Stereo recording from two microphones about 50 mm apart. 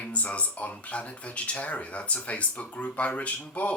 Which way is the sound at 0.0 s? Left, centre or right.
Left.